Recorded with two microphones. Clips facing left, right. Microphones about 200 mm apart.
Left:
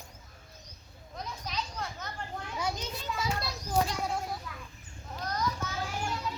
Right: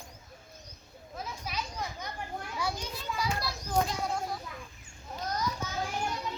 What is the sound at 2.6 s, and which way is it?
Children playing, 20° left (ahead or behind).